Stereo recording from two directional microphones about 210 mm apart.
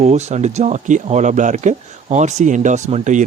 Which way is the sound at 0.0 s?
30° right (ahead or behind).